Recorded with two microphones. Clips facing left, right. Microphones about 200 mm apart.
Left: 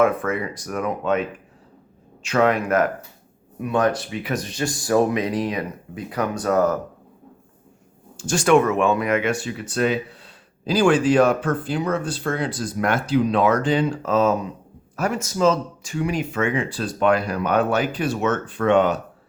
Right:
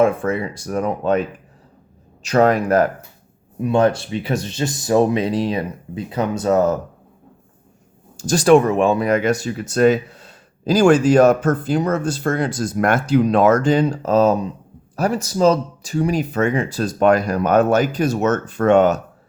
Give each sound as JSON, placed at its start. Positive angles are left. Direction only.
{"t": 0.0, "sound": "speech", "side_deg": -30}
{"t": 2.2, "sound": "speech", "side_deg": -40}
{"t": 8.1, "sound": "speech", "side_deg": -40}